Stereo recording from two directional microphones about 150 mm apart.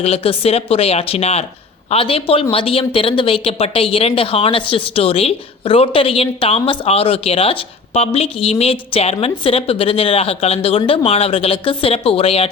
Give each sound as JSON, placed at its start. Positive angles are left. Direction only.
{"t": 0.0, "sound": "speech", "side_deg": 40}